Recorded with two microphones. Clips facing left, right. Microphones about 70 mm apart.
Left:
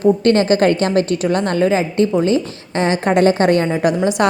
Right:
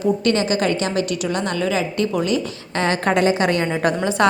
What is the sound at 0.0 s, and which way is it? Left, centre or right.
A woman's voice, left.